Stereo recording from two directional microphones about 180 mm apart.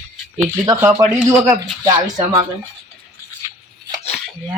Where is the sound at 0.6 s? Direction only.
20° right (ahead or behind).